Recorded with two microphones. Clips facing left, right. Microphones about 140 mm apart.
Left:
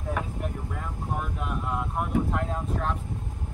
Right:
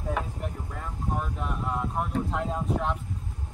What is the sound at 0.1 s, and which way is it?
Vehicle, centre (ahead or behind).